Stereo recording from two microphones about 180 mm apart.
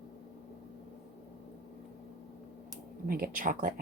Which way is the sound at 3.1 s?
50° right (ahead or behind).